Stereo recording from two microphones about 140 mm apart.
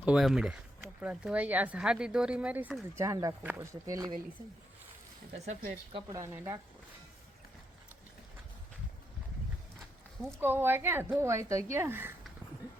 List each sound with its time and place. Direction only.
0.0 s speech: 5° right (ahead or behind)
2.9 s speech: 20° right (ahead or behind)
5.9 s speech: 25° right (ahead or behind)
10.3 s speech: 15° right (ahead or behind)